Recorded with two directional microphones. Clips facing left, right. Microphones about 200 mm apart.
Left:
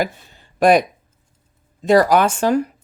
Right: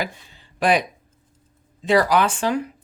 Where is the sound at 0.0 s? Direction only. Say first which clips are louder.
Left 6 dB; 45° left (ahead or behind).